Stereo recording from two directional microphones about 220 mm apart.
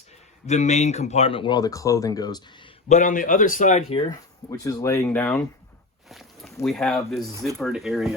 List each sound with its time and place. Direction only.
0.4 s speech: 30° left (ahead or behind)
2.9 s speech: 35° left (ahead or behind); by 5.4 s 5° left (ahead or behind)
6.1 s a sound: centre (ahead or behind)
6.7 s speech: centre (ahead or behind)
7.3 s speech: 15° right (ahead or behind)
7.6 s speech: centre (ahead or behind)